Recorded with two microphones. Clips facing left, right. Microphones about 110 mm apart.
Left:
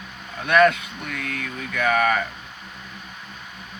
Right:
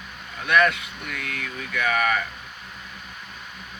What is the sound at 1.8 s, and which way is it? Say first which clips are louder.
Speech: left 3 dB; 35° left (ahead or behind).